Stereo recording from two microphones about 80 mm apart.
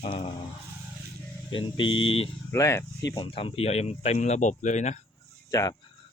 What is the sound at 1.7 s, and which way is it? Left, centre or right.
Speech, left.